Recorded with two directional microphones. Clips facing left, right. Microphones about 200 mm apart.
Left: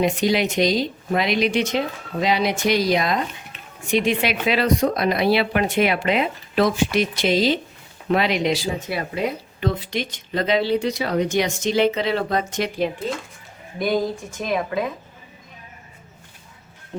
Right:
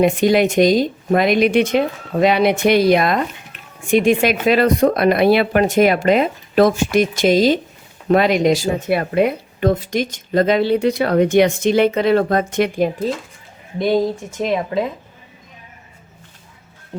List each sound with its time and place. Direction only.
0.0 s speech: 50° right (ahead or behind)
13.7 s speech: 25° right (ahead or behind)
16.9 s music: 10° right (ahead or behind)